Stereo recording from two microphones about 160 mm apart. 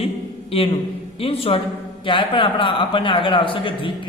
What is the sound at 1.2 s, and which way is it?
A man's voice, 35° left (ahead or behind).